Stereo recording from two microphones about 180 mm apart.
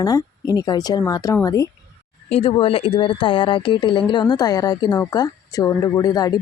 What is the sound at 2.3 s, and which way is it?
Speech, 30° left (ahead or behind).